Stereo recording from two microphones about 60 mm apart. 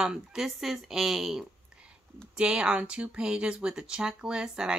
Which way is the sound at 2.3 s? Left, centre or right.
Centre.